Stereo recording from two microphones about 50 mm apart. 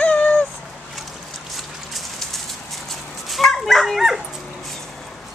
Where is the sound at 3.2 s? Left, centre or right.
Centre.